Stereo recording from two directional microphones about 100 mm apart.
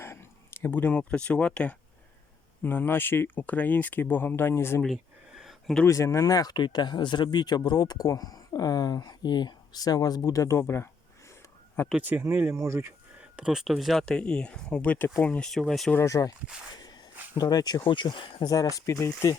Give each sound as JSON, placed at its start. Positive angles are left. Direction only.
{"t": 0.0, "sound": "speech", "side_deg": 25}
{"t": 4.9, "sound": "a sound", "side_deg": -5}
{"t": 5.8, "sound": "speech", "side_deg": 30}
{"t": 12.0, "sound": "speech", "side_deg": -20}
{"t": 13.3, "sound": "speech", "side_deg": -10}
{"t": 14.0, "sound": "speech", "side_deg": 10}
{"t": 15.4, "sound": "speech", "side_deg": 0}
{"t": 16.0, "sound": "speech", "side_deg": 35}
{"t": 16.7, "sound": "a sound", "side_deg": 45}
{"t": 17.8, "sound": "speech", "side_deg": 55}
{"t": 18.4, "sound": "speech", "side_deg": 40}
{"t": 18.9, "sound": "speech", "side_deg": 30}